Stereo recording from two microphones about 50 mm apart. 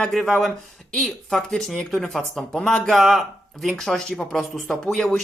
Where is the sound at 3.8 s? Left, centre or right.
Centre.